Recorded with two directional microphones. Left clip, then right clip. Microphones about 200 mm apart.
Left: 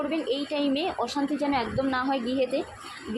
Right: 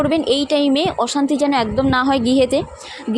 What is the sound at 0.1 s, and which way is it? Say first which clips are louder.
A woman's voice: right 12 dB; 45° right (ahead or behind).